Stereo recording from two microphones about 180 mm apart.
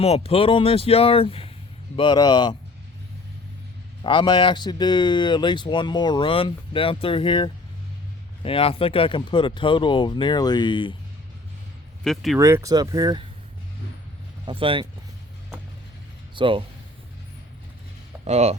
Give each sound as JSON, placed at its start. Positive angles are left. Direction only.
{"t": 0.0, "sound": "speech", "side_deg": 35}
{"t": 4.0, "sound": "speech", "side_deg": 25}
{"t": 12.0, "sound": "speech", "side_deg": 0}
{"t": 12.4, "sound": "speech", "side_deg": -15}
{"t": 14.4, "sound": "speech", "side_deg": -30}
{"t": 16.3, "sound": "speech", "side_deg": -30}
{"t": 18.3, "sound": "speech", "side_deg": -35}